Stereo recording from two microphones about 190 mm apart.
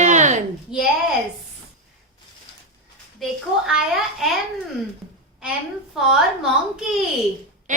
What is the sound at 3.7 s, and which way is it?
Speech, centre (ahead or behind).